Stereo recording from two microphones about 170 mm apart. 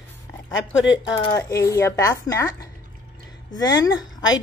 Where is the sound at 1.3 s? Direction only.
15° left (ahead or behind).